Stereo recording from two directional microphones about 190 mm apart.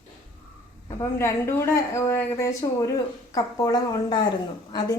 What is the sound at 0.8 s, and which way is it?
Speech, 15° left (ahead or behind).